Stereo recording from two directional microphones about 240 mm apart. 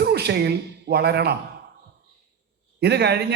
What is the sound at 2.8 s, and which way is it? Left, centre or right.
Speech, right.